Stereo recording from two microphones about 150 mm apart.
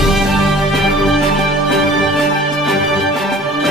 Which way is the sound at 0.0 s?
Centre (ahead or behind).